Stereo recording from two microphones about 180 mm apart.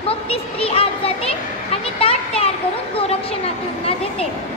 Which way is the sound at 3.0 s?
35° left (ahead or behind).